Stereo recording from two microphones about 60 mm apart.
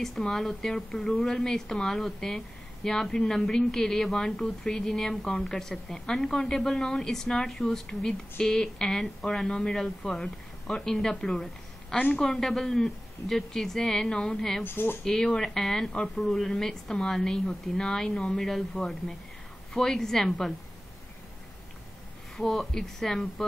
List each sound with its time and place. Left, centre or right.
0.0 s a woman's voice: centre
14.6 s speech: left
15.0 s a woman's voice: centre
22.4 s a woman's voice: centre